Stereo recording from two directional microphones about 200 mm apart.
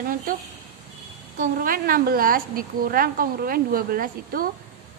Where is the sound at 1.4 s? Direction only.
45° right (ahead or behind).